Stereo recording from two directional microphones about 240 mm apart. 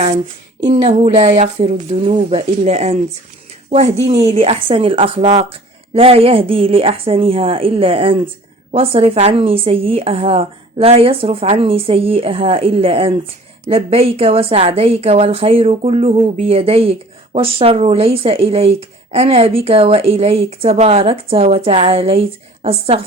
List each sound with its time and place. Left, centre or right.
0.7 s speech: right